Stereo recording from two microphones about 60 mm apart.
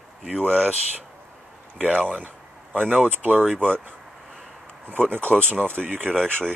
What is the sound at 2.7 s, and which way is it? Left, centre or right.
Speech, centre.